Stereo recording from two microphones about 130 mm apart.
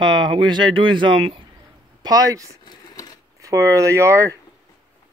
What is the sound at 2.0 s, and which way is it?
Speech, 30° right (ahead or behind).